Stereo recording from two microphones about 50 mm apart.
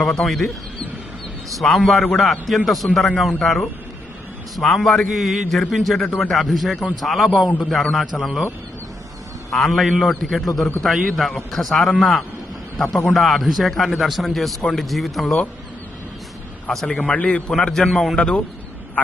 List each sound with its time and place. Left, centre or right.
0.0 s a man's voice: centre
1.7 s a man's voice: centre
4.5 s a man's voice: centre
9.6 s a man's voice: centre
16.6 s a man's voice: centre
17.1 s a man's voice: left
17.6 s a man's voice: centre
18.2 s a man's voice: left